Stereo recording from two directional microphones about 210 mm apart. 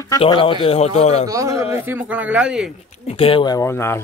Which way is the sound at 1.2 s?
15° right (ahead or behind).